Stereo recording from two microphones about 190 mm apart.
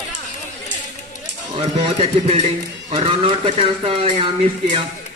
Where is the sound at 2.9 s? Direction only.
30° right (ahead or behind).